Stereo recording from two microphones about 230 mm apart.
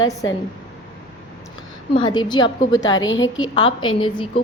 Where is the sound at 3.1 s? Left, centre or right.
Left.